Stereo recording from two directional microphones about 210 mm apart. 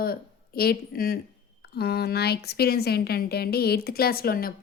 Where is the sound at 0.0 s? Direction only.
45° left (ahead or behind).